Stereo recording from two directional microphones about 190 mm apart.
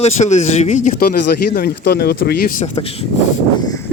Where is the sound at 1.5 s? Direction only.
55° left (ahead or behind).